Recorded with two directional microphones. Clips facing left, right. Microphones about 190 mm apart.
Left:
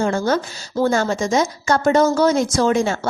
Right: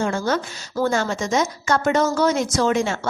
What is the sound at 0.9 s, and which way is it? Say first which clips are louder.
A woman's voice: left 3 dB; 35° left (ahead or behind).